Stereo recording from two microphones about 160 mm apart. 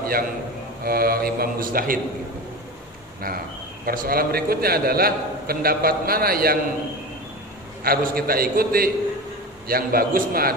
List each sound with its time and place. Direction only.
0.8 s a man's voice: 70° right (ahead or behind)
3.8 s a man's voice: 65° right (ahead or behind)
7.8 s a man's voice: 65° right (ahead or behind)